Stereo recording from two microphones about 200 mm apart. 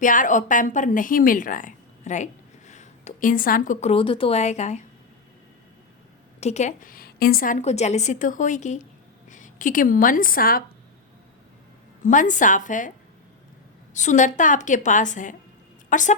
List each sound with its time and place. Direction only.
0.0 s a woman's voice: 40° left (ahead or behind)
6.4 s a woman's voice: 35° left (ahead or behind)
12.0 s a woman's voice: 40° left (ahead or behind)
13.9 s a woman's voice: 35° left (ahead or behind)